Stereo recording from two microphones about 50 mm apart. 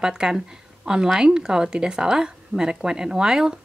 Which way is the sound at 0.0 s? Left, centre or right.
Centre.